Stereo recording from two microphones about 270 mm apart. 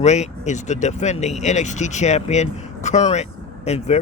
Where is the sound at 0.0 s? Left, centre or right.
Left.